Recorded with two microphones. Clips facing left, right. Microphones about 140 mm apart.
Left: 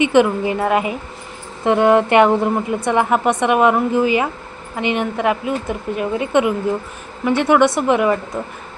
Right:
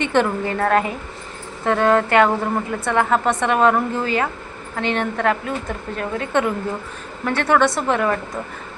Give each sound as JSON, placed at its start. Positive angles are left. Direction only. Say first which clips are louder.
{"t": 0.0, "sound": "a woman's voice", "louder": "left 5 dB", "side_deg": 10}